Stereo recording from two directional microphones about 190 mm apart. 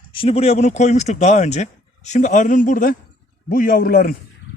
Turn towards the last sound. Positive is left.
turn(degrees=50)  # may be behind; listen again after turning